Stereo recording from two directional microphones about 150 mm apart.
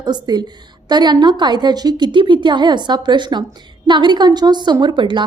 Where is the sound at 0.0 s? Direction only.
30° right (ahead or behind).